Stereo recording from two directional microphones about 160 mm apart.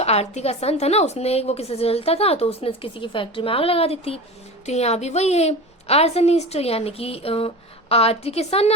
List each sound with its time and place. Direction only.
0.0 s a woman's voice: 40° left (ahead or behind)